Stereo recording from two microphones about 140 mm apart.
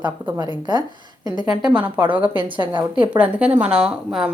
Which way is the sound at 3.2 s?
10° right (ahead or behind).